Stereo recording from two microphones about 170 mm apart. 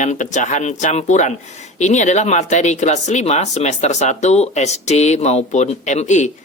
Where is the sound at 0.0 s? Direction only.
45° left (ahead or behind).